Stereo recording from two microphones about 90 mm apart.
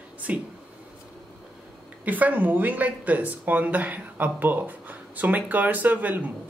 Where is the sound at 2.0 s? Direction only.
20° right (ahead or behind).